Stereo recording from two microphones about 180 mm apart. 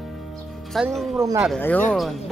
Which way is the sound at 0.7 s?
Centre (ahead or behind).